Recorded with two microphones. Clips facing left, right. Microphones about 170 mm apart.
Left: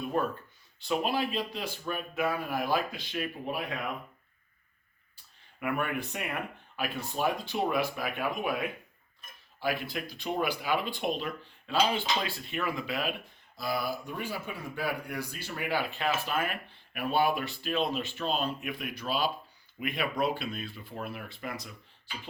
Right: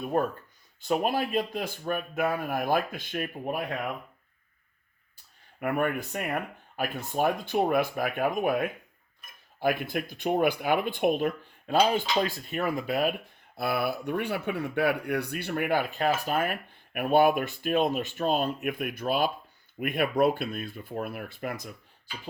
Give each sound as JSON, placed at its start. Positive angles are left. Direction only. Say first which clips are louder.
{"t": 0.1, "sound": "speech", "louder": "right 4 dB", "side_deg": -45}
{"t": 5.5, "sound": "speech", "louder": "right 4 dB", "side_deg": -45}
{"t": 13.6, "sound": "speech", "louder": "right 4 dB", "side_deg": -60}